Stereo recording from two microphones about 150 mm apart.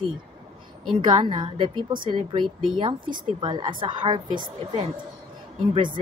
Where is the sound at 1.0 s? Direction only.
30° right (ahead or behind).